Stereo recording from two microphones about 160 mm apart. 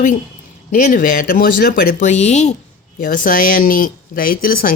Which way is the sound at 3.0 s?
55° left (ahead or behind).